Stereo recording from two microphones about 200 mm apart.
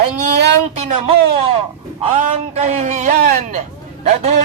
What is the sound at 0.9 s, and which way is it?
A man's voice, 30° right (ahead or behind).